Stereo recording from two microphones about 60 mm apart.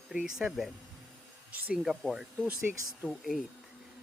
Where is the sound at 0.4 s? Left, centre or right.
Right.